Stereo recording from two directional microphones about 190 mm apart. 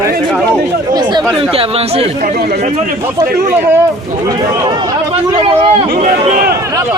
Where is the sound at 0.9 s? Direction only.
20° right (ahead or behind).